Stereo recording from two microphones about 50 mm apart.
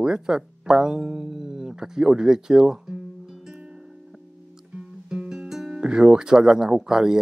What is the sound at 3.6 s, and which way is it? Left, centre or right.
Music, right.